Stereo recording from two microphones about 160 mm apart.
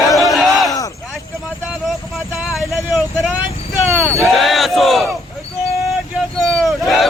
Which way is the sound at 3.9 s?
15° right (ahead or behind).